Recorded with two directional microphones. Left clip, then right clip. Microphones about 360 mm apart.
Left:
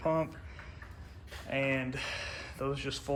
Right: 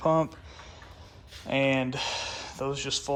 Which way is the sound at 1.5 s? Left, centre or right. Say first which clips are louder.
Right 7 dB; centre.